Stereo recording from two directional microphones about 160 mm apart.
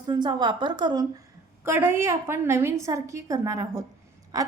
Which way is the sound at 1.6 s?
15° right (ahead or behind).